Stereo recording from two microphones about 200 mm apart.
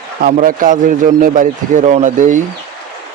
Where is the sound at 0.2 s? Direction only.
45° right (ahead or behind).